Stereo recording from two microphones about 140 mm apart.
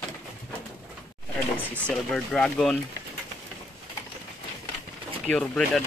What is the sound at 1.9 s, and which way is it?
Speech, 5° left (ahead or behind).